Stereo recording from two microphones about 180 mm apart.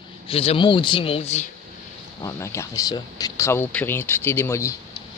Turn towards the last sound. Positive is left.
turn(degrees=15)  # may be behind; listen again after turning